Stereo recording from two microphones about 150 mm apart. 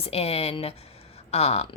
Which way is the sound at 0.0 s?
45° left (ahead or behind).